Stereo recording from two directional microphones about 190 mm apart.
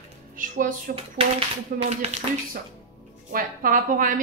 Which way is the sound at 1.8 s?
35° right (ahead or behind).